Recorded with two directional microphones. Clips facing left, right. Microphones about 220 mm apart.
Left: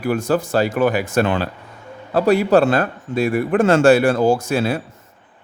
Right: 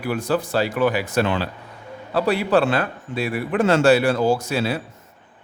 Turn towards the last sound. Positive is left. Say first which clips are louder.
# left 3 dB
turn(degrees=50)  # may be behind; listen again after turning